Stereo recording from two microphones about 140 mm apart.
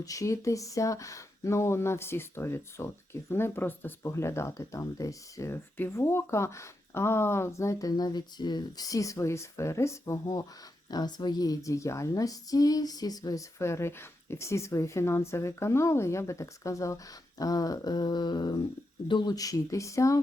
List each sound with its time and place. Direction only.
0.0 s speech: 25° left (ahead or behind)